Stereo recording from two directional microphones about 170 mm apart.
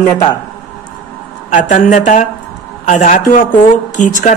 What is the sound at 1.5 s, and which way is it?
A woman's voice, 45° left (ahead or behind).